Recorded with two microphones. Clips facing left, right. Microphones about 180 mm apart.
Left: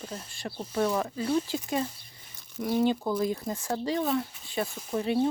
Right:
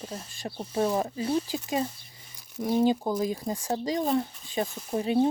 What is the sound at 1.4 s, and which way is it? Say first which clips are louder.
Speech: right 1 dB; 15° right (ahead or behind).